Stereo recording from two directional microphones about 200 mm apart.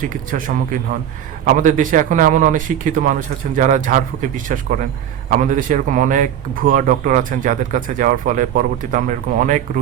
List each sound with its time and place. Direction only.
0.3 s speech: 40° right (ahead or behind)